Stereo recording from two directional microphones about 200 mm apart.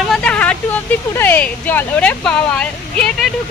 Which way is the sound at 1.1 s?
10° left (ahead or behind).